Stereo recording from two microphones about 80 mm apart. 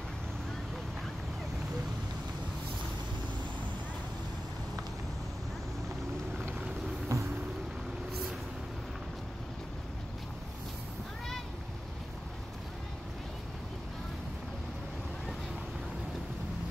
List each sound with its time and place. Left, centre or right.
7.1 s vehicle: right